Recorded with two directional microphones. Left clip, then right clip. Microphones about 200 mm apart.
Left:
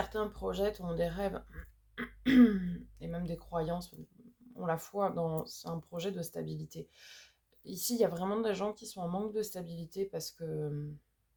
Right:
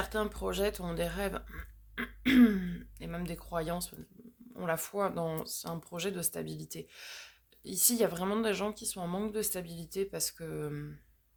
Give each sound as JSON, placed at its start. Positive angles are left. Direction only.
{"t": 0.1, "sound": "speech", "side_deg": -35}